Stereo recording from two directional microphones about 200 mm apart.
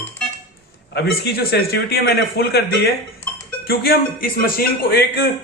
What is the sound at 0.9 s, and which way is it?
A man's voice, 55° left (ahead or behind).